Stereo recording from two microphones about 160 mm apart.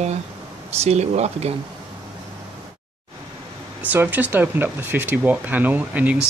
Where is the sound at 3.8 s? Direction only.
10° right (ahead or behind).